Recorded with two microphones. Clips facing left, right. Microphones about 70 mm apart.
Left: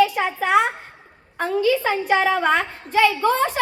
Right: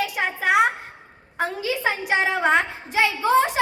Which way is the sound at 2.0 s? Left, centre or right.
Centre.